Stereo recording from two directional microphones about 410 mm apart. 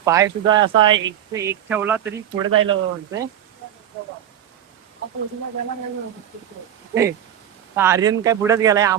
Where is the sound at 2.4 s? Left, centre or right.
Right.